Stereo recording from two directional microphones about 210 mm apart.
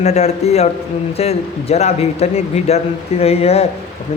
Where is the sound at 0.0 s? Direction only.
30° left (ahead or behind).